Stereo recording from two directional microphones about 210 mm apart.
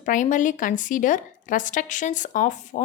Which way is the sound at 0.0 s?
40° left (ahead or behind).